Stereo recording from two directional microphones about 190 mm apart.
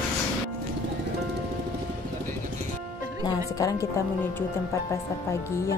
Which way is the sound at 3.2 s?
20° left (ahead or behind).